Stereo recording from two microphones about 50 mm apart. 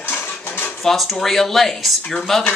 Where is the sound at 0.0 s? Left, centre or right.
Left.